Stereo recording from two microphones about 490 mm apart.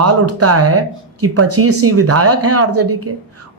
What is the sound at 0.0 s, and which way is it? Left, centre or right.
Speech, right.